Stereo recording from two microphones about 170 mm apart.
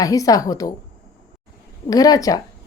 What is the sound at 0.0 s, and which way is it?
Speech, 20° left (ahead or behind).